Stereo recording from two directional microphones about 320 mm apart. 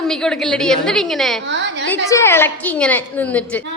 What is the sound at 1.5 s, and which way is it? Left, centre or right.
Speech, right.